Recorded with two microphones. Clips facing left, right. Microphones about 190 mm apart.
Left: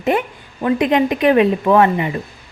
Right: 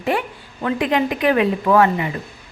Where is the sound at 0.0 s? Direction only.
20° left (ahead or behind).